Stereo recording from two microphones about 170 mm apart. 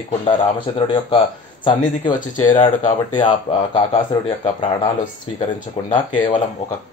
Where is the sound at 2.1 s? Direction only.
50° left (ahead or behind).